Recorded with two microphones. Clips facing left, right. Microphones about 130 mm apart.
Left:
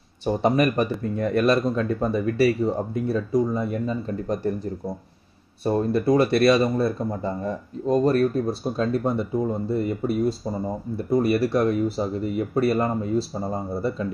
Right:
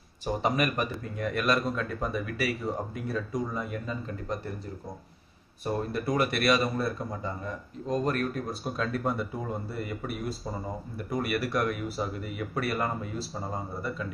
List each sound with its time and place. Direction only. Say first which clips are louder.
0.2 s speech: left 7 dB; 30° left (ahead or behind)
5.6 s speech: left 9 dB; 30° left (ahead or behind)